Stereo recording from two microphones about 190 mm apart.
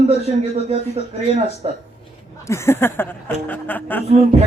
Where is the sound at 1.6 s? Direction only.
30° right (ahead or behind).